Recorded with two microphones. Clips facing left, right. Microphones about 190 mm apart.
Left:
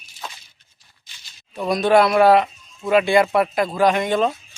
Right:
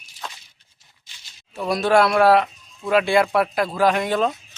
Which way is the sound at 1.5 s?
Centre (ahead or behind).